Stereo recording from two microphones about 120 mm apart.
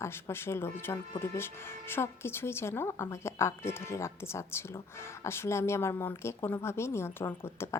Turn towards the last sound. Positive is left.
turn(degrees=20)  # may be behind; listen again after turning